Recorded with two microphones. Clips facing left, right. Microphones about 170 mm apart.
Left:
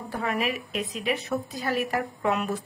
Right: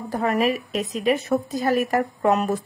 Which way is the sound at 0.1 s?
40° right (ahead or behind).